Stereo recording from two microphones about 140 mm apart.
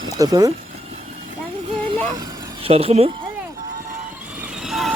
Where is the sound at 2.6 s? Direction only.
45° right (ahead or behind).